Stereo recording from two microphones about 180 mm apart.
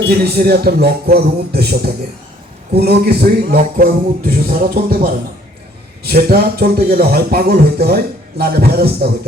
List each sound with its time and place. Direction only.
0.3 s speech: 60° right (ahead or behind)
6.0 s speech: 60° right (ahead or behind)